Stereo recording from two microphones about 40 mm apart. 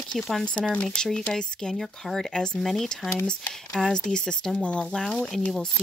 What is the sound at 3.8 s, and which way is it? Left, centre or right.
Speech, centre.